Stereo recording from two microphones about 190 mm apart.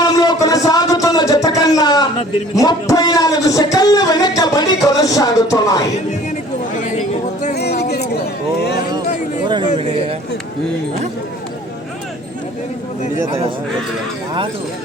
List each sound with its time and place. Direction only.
0.0 s music: 20° left (ahead or behind)
2.6 s speech: 20° left (ahead or behind)
7.5 s music: 60° left (ahead or behind)